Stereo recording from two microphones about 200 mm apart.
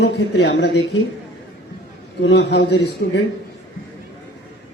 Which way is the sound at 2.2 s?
55° left (ahead or behind).